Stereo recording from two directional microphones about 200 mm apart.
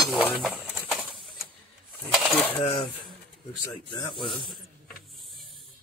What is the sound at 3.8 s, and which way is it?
Speech, 25° left (ahead or behind).